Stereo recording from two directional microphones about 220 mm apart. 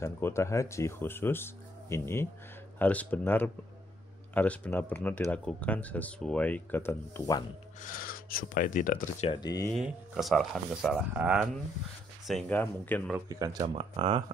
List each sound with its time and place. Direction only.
0.0 s speech: 10° left (ahead or behind)
7.8 s speech: 40° left (ahead or behind)
9.3 s speech: 15° left (ahead or behind)
9.7 s speech: centre (ahead or behind)
13.1 s speech: 15° right (ahead or behind)